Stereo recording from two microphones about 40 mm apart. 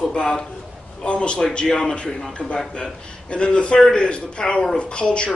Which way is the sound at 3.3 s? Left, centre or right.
Left.